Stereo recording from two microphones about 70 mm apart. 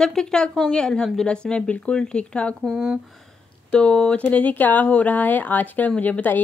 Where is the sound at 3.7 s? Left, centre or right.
Centre.